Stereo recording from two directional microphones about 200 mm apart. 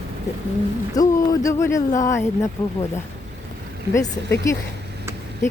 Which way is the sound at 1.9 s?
40° left (ahead or behind).